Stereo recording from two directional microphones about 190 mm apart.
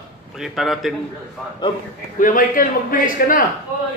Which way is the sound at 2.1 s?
45° left (ahead or behind).